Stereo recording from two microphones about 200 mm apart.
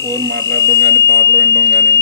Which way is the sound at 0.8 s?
55° right (ahead or behind).